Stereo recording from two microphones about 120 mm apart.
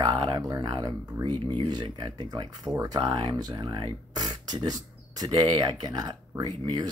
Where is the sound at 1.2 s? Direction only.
40° right (ahead or behind).